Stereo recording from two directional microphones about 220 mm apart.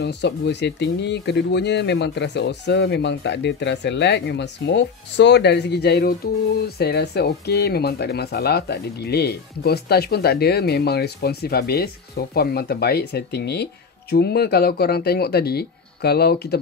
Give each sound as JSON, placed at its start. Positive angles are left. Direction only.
{"t": 0.0, "sound": "speech", "side_deg": 50}